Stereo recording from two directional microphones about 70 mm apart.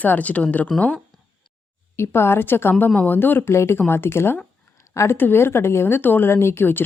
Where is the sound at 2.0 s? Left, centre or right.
Left.